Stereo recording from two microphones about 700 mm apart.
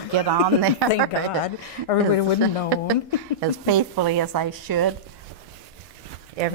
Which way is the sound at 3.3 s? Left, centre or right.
Right.